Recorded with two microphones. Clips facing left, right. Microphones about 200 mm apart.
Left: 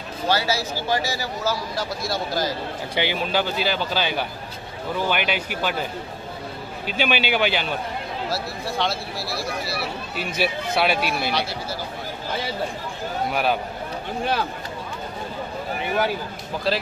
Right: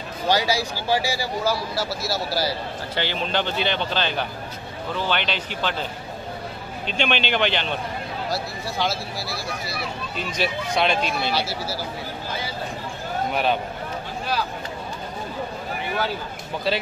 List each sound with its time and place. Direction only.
0.3 s speech: 15° right (ahead or behind)
2.9 s speech: 10° left (ahead or behind)
6.9 s speech: 5° left (ahead or behind)
11.3 s speech: 5° right (ahead or behind)
13.3 s speech: centre (ahead or behind)
16.7 s speech: centre (ahead or behind)